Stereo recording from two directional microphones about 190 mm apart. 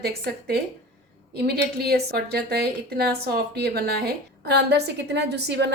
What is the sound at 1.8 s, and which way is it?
A woman's voice, 55° right (ahead or behind).